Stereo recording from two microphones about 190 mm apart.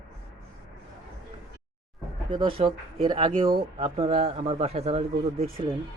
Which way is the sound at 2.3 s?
25° right (ahead or behind).